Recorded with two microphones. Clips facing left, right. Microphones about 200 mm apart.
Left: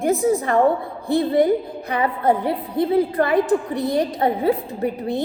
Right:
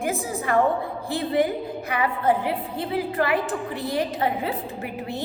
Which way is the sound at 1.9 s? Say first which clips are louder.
Left 3 dB; 35° left (ahead or behind).